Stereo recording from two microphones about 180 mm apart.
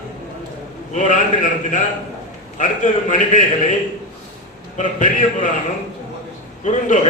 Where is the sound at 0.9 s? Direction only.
45° left (ahead or behind).